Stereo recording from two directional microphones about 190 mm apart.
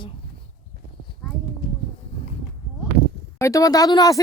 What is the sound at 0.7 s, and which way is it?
Clip-clop, 55° right (ahead or behind).